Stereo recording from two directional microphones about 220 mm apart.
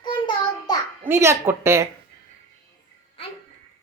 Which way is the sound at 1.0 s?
10° right (ahead or behind).